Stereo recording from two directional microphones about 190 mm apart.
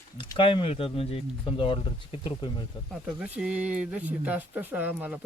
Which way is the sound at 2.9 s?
5° right (ahead or behind).